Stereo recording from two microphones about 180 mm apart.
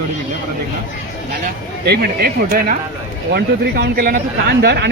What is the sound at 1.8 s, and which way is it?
Speech, 60° right (ahead or behind).